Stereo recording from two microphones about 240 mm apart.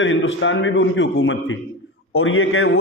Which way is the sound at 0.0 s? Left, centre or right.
Left.